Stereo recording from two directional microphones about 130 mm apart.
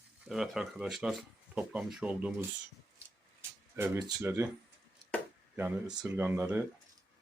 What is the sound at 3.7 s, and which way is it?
Speech, 20° right (ahead or behind).